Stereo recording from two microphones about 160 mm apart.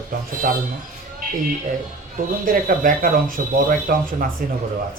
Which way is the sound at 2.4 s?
60° right (ahead or behind).